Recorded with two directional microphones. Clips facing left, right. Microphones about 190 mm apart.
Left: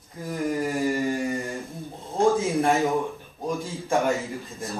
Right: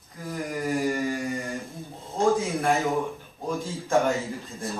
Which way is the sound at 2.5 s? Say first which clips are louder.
Left 3 dB; 15° left (ahead or behind).